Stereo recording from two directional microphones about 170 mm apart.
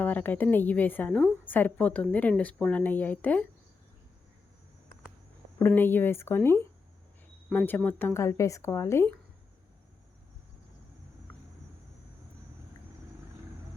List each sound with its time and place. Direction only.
0.0 s a woman's voice: 10° left (ahead or behind)
5.5 s a woman's voice: 10° left (ahead or behind)